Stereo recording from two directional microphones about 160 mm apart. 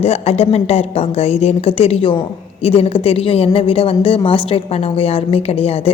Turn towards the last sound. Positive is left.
turn(degrees=40)  # may be behind; listen again after turning